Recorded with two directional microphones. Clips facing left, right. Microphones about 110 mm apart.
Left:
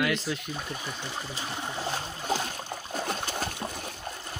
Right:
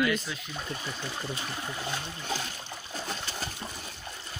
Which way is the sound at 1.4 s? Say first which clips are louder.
Left 2 dB; 20° left (ahead or behind).